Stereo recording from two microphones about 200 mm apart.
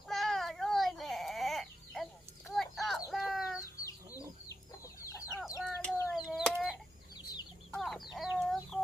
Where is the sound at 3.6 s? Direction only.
15° left (ahead or behind).